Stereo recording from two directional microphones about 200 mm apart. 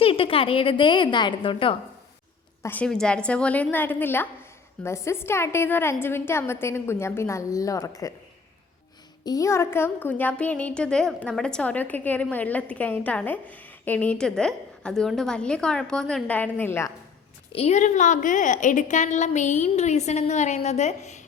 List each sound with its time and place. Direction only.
0.0 s a woman's voice: 25° left (ahead or behind)
2.6 s speech: 5° left (ahead or behind)
9.2 s speech: 15° left (ahead or behind)
17.5 s a woman's voice: 35° left (ahead or behind)